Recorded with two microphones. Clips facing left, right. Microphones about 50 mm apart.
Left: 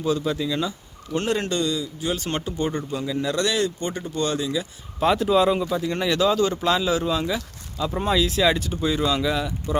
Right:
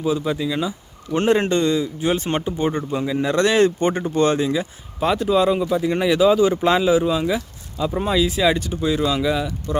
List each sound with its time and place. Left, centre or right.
0.0 s speech: centre
1.1 s speech: right
4.9 s speech: centre